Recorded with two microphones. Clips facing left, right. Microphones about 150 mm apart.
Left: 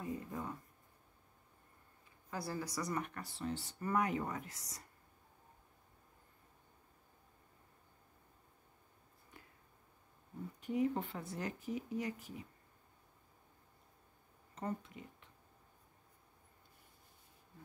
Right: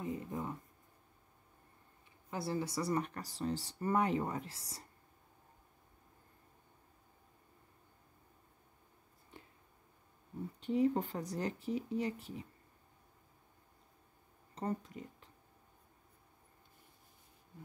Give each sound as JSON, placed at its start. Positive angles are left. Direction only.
{"t": 0.0, "sound": "a sound", "side_deg": -20}
{"t": 2.3, "sound": "speech", "side_deg": -25}
{"t": 10.6, "sound": "speech", "side_deg": -30}
{"t": 14.5, "sound": "speech", "side_deg": -35}